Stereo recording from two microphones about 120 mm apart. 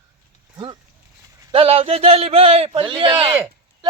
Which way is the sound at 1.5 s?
50° right (ahead or behind).